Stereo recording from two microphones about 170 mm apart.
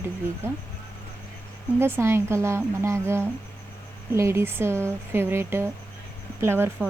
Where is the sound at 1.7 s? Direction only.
15° right (ahead or behind).